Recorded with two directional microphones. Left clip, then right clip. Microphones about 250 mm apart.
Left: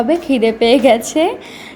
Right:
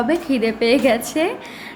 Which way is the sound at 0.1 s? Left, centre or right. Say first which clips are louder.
Left 5 dB; centre.